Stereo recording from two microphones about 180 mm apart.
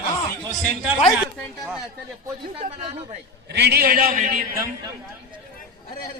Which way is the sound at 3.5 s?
65° right (ahead or behind).